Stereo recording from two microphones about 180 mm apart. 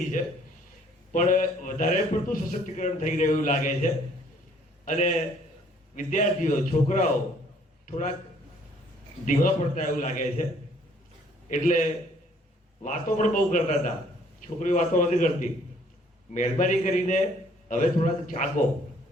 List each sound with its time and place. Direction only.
1.1 s a man's voice: 45° left (ahead or behind)
4.9 s a man's voice: 40° left (ahead or behind)
9.2 s a man's voice: 45° left (ahead or behind)
11.4 s a man's voice: 45° left (ahead or behind)